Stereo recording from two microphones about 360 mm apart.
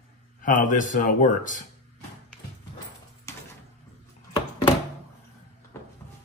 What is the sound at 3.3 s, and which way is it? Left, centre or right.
Door, centre.